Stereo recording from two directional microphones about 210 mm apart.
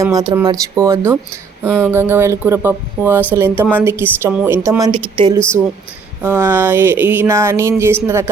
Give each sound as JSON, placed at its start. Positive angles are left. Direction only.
{"t": 0.0, "sound": "speech", "side_deg": -15}
{"t": 6.2, "sound": "speech", "side_deg": -10}